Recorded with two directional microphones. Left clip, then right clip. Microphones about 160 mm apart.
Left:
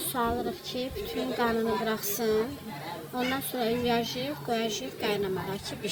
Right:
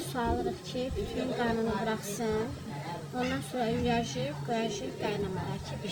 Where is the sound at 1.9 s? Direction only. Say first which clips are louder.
Left 4 dB; 45° left (ahead or behind).